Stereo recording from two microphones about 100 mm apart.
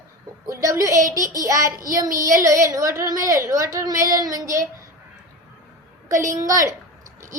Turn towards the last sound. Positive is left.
turn(degrees=-35)  # may be behind; listen again after turning